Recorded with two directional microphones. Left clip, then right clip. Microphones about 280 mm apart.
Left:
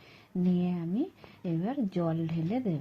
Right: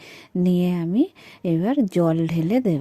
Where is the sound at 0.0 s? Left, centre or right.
Right.